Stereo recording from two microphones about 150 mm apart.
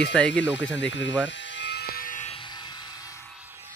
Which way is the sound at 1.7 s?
90° left.